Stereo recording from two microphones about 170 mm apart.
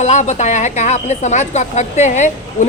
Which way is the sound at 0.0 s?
45° left (ahead or behind).